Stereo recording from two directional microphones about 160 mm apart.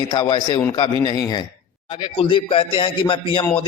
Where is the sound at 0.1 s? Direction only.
30° left (ahead or behind).